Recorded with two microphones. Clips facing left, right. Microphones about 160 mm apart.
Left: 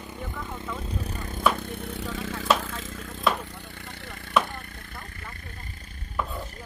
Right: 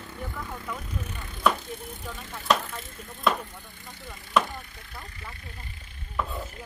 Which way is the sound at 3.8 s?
70° left (ahead or behind).